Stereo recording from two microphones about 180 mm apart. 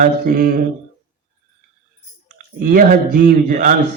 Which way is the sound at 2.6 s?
50° right (ahead or behind).